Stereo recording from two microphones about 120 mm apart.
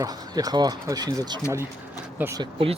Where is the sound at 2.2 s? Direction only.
15° right (ahead or behind).